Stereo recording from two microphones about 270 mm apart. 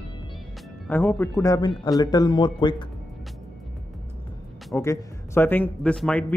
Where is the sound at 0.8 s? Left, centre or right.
Centre.